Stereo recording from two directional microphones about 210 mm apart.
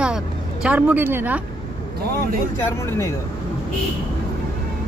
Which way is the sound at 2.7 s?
15° left (ahead or behind).